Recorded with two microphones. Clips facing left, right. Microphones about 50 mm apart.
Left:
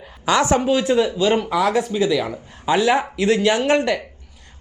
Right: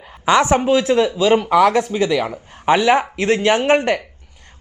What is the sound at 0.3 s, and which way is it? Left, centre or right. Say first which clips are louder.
Speech: right 3 dB; right.